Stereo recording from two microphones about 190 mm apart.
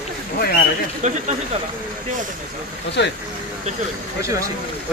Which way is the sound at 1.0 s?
40° right (ahead or behind).